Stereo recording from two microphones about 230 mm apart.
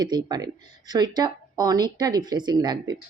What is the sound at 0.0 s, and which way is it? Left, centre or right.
Speech, centre.